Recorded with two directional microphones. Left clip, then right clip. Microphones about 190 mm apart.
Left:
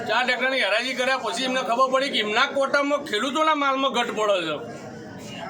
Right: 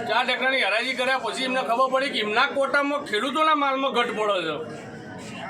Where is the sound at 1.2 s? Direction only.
10° left (ahead or behind).